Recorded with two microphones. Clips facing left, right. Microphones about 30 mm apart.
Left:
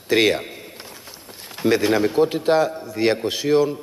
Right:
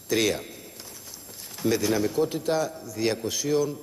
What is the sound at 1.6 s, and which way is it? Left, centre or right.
A man's voice, left.